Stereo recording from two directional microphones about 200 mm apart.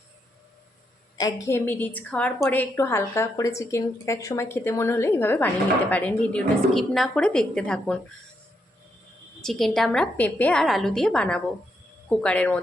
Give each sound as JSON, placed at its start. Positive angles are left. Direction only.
{"t": 1.2, "sound": "a woman's voice", "side_deg": 15}
{"t": 9.4, "sound": "a woman's voice", "side_deg": 0}